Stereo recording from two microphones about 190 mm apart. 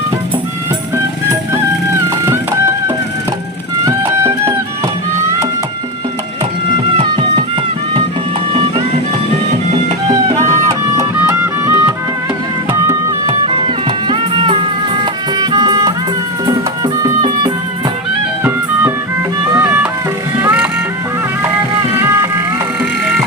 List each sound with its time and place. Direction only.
3.8 s music: 15° right (ahead or behind)
7.0 s music: 30° right (ahead or behind)
10.1 s music: 25° right (ahead or behind)
13.4 s music: 30° right (ahead or behind); by 20.7 s 10° right (ahead or behind)